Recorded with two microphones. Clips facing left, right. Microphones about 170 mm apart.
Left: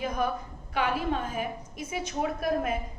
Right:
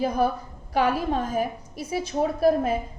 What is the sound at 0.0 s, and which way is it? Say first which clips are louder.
A woman's voice: right 6 dB; 35° right (ahead or behind).